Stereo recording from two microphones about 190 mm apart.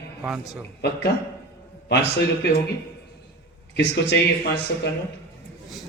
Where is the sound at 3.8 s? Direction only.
60° left (ahead or behind).